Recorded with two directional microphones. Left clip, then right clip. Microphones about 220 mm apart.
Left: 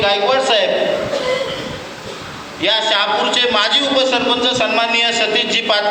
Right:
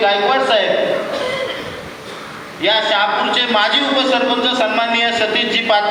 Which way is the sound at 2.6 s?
50° left (ahead or behind).